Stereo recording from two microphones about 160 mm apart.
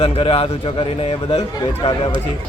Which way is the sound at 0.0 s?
35° left (ahead or behind).